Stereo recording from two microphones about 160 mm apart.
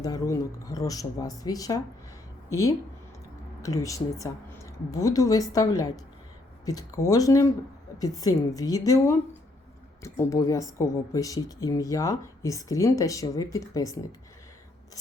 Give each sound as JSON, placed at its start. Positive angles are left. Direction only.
{"t": 0.0, "sound": "speech", "side_deg": 20}